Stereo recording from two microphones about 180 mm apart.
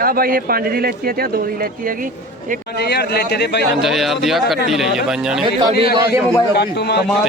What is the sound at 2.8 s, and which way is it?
Speech, 65° left (ahead or behind).